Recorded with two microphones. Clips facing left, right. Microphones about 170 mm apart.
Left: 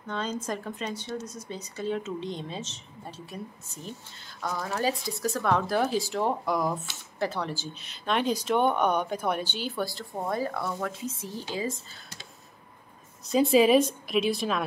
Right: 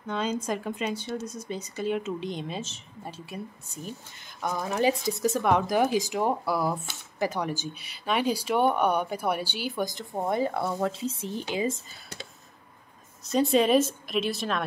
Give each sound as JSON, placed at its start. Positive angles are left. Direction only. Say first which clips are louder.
{"t": 0.1, "sound": "speech", "louder": "right 3 dB", "side_deg": -10}
{"t": 4.4, "sound": "speech", "louder": "right 3 dB", "side_deg": -20}
{"t": 13.2, "sound": "a woman's voice", "louder": "left 2 dB", "side_deg": 0}